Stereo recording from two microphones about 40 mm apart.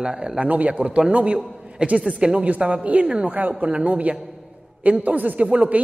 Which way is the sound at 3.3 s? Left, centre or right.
Right.